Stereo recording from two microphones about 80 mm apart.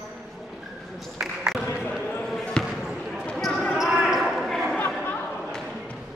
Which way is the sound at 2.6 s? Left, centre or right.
Centre.